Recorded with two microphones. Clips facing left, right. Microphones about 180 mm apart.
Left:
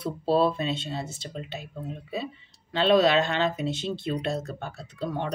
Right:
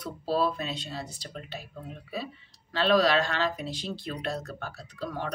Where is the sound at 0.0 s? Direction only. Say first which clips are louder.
Left 5 dB; 25° left (ahead or behind).